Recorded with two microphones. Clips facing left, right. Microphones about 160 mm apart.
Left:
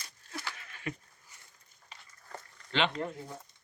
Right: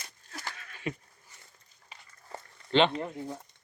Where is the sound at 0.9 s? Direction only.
20° right (ahead or behind).